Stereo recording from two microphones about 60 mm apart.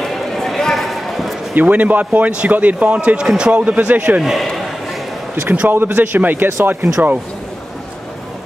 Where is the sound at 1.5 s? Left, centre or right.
Right.